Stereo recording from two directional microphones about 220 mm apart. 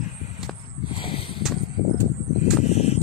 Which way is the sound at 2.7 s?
30° left (ahead or behind).